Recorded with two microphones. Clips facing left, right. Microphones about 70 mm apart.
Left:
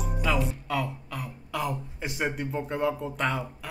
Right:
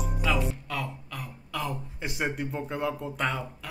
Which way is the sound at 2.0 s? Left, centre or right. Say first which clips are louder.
Even; centre.